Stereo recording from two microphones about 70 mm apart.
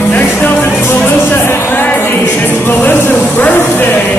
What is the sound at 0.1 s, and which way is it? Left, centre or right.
Music, left.